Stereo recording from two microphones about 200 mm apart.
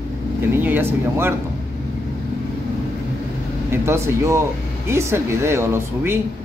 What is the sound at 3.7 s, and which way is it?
Speech, 15° right (ahead or behind).